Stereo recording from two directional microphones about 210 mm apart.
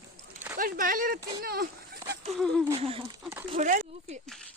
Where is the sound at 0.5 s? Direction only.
40° right (ahead or behind).